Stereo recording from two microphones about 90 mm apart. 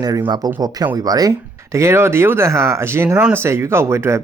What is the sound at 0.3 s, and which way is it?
Speech, 45° right (ahead or behind).